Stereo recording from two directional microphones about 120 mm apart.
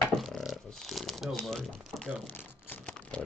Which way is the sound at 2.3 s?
15° left (ahead or behind).